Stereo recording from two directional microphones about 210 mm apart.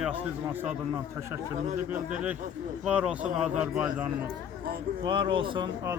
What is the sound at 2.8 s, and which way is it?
Speech, 5° right (ahead or behind).